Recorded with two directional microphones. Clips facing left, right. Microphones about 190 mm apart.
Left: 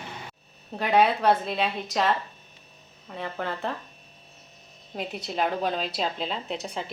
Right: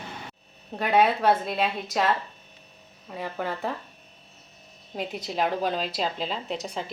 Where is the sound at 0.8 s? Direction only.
Centre (ahead or behind).